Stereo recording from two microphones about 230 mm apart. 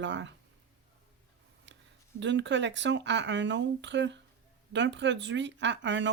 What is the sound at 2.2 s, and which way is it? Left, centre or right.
Speech, right.